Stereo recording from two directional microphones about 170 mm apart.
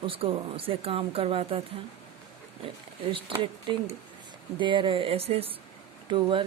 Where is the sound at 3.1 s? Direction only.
30° right (ahead or behind).